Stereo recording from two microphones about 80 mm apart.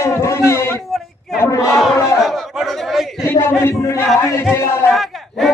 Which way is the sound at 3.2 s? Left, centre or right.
Left.